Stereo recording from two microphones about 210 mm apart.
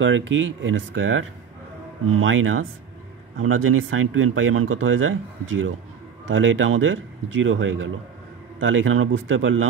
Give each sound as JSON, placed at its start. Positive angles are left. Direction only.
{"t": 0.0, "sound": "speech", "side_deg": -65}
{"t": 6.2, "sound": "speech", "side_deg": -65}